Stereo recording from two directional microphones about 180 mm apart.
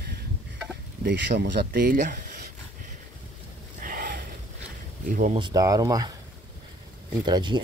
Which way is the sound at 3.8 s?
50° right (ahead or behind).